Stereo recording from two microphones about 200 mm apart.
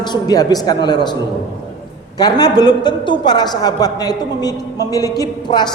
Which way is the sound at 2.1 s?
20° left (ahead or behind).